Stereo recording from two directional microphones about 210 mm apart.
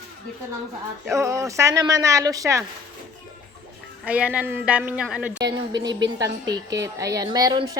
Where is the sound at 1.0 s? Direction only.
15° right (ahead or behind).